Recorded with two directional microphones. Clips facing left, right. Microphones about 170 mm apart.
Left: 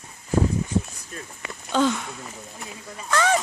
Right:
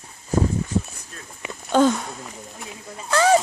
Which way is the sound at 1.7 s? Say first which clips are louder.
Right 4 dB; 45° right (ahead or behind).